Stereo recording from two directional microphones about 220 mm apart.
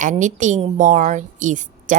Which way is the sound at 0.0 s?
35° right (ahead or behind).